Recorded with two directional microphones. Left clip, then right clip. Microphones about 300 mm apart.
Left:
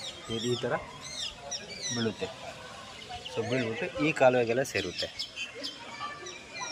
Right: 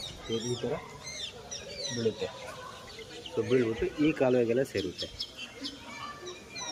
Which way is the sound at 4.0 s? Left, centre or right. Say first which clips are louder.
Left 3 dB; centre.